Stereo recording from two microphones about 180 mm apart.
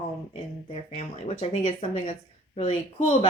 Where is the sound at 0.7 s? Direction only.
35° left (ahead or behind).